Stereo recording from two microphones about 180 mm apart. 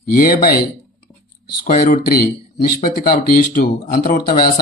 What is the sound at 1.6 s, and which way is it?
Speech, 45° left (ahead or behind).